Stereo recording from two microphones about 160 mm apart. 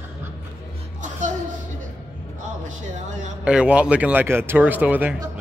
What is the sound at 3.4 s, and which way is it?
Speech, 5° right (ahead or behind).